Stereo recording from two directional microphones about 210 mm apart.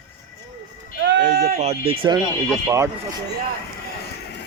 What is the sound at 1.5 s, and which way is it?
Speech, 30° right (ahead or behind).